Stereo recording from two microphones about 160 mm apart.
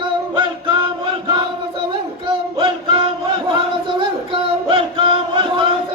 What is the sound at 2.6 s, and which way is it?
Music, 30° right (ahead or behind).